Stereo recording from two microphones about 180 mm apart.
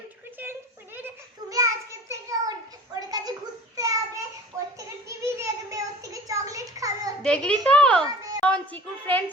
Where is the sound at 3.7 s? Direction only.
20° right (ahead or behind).